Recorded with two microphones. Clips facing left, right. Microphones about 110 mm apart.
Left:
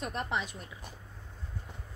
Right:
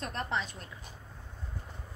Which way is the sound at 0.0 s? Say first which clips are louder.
Even; 10° left (ahead or behind).